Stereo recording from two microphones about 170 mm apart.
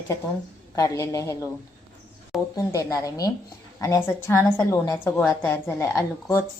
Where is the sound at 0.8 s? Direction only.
20° left (ahead or behind).